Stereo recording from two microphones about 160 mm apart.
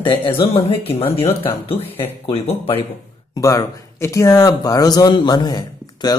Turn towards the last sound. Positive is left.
turn(degrees=25)  # may be behind; listen again after turning